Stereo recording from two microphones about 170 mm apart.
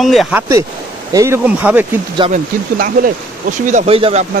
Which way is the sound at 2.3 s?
50° right (ahead or behind).